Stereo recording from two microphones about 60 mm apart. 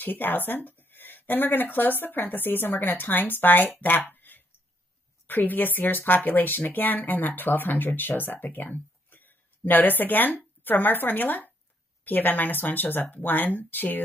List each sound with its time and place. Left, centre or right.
0.0 s speech: left